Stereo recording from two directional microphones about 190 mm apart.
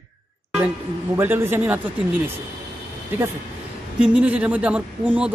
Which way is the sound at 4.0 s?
5° right (ahead or behind).